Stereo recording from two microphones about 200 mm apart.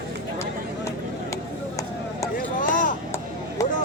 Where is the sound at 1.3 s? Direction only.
15° left (ahead or behind).